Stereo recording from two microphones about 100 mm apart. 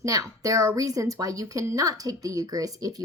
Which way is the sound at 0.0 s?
35° right (ahead or behind).